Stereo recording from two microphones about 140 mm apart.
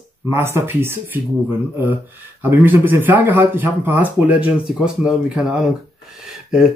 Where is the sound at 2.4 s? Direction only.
15° right (ahead or behind).